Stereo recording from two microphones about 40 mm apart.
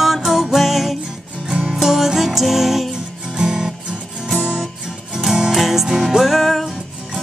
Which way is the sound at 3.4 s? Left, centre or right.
Centre.